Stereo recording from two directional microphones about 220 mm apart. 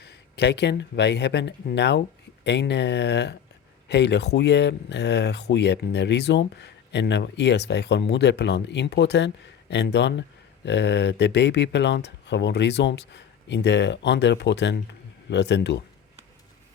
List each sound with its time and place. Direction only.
0.0 s speech: 50° left (ahead or behind)